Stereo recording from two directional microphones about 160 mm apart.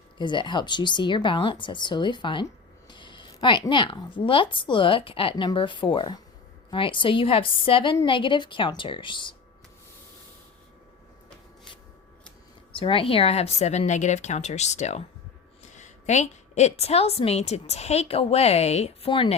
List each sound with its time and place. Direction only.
0.2 s a woman's voice: 30° left (ahead or behind)
12.7 s a woman's voice: 35° left (ahead or behind)